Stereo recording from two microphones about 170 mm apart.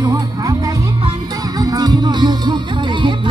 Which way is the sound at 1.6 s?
25° right (ahead or behind).